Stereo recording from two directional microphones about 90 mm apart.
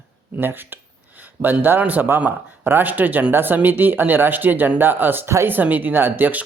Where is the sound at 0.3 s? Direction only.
25° right (ahead or behind).